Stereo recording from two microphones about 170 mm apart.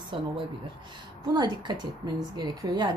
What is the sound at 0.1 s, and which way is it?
Speech, 30° right (ahead or behind).